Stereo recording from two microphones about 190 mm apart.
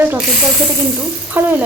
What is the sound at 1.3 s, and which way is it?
Speech, 10° right (ahead or behind).